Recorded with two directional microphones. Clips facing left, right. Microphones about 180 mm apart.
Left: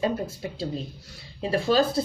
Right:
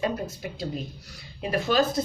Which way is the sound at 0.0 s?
25° left (ahead or behind).